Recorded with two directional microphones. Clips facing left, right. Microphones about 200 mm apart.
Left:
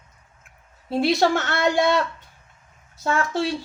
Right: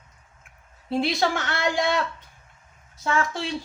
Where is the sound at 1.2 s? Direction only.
45° left (ahead or behind).